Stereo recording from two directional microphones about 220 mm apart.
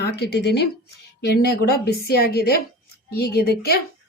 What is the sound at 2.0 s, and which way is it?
Speech, 45° left (ahead or behind).